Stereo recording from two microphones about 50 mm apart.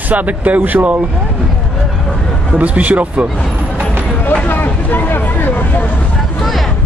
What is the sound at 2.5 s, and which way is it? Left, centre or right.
Speech, right.